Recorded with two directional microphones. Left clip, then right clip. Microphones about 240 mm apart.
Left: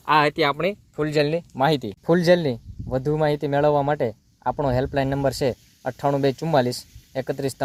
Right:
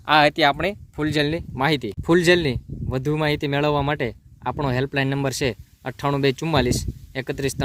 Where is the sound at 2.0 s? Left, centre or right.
Right.